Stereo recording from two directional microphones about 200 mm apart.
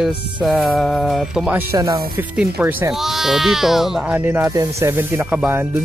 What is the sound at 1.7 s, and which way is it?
Speech, 15° right (ahead or behind).